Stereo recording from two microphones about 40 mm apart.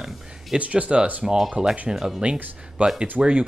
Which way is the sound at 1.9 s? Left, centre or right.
Centre.